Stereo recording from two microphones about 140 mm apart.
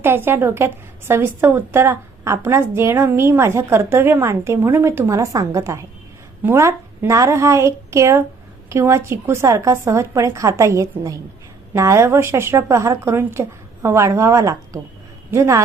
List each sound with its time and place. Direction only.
0.0 s a woman's voice: 15° right (ahead or behind)